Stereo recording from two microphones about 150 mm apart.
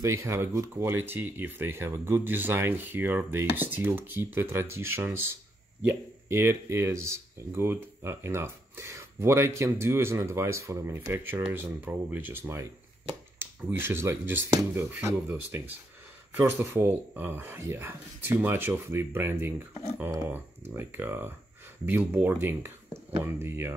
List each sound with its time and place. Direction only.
0.0 s speech: 20° right (ahead or behind)